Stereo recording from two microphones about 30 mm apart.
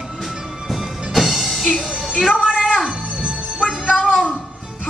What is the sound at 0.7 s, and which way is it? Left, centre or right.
Music, centre.